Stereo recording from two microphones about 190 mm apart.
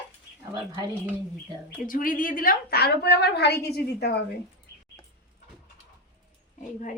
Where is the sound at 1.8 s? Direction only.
45° left (ahead or behind).